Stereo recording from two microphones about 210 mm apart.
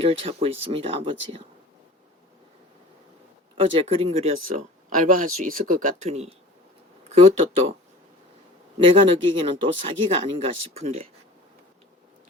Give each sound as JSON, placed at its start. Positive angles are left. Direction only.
{"t": 0.0, "sound": "speech", "side_deg": -25}
{"t": 3.6, "sound": "speech", "side_deg": -25}
{"t": 4.4, "sound": "speech", "side_deg": -40}
{"t": 8.8, "sound": "speech", "side_deg": -25}